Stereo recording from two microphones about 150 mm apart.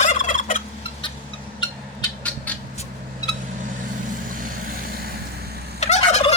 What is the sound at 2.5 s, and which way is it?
Vehicle, 10° left (ahead or behind).